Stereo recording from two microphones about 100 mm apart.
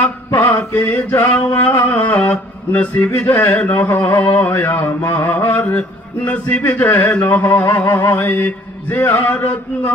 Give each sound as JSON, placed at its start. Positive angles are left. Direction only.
{"t": 0.0, "sound": "mantra", "side_deg": 25}
{"t": 1.8, "sound": "a sound", "side_deg": 20}
{"t": 4.4, "sound": "mantra", "side_deg": 25}